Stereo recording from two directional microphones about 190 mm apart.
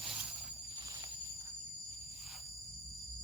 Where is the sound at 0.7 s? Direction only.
20° right (ahead or behind).